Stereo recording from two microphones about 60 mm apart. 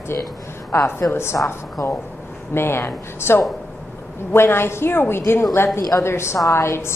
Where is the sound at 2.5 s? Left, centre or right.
Left.